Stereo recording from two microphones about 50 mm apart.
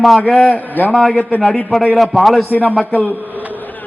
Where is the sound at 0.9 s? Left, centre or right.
Centre.